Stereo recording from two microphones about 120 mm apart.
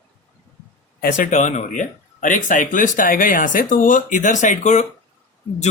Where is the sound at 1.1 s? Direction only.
85° left.